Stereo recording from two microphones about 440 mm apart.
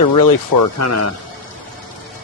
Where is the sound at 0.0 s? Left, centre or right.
Left.